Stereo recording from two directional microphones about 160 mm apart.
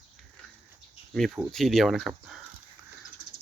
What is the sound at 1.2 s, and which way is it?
Speech, centre (ahead or behind).